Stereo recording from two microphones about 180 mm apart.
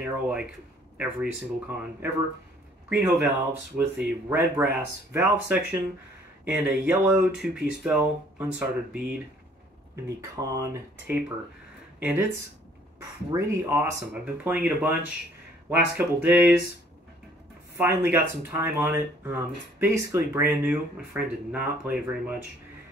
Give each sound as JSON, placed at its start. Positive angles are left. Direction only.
{"t": 0.0, "sound": "speech", "side_deg": -5}
{"t": 10.0, "sound": "speech", "side_deg": -15}
{"t": 13.3, "sound": "speech", "side_deg": -15}
{"t": 17.7, "sound": "speech", "side_deg": -10}